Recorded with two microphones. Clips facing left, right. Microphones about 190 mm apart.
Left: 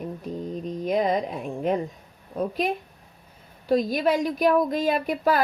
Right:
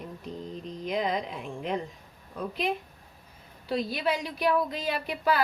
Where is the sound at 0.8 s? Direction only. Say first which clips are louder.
Left 6 dB; 45° left (ahead or behind).